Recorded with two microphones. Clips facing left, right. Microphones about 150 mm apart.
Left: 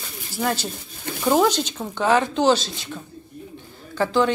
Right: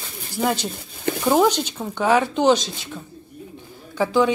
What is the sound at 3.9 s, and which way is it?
Speech, 10° right (ahead or behind).